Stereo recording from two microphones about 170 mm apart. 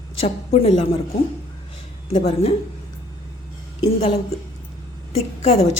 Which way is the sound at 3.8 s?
35° left (ahead or behind).